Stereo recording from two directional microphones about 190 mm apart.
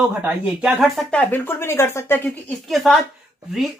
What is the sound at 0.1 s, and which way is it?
Speech, 10° right (ahead or behind).